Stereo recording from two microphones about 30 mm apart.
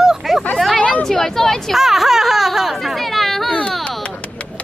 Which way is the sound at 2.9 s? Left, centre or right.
Centre.